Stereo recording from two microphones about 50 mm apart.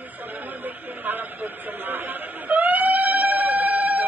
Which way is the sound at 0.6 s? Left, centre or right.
Right.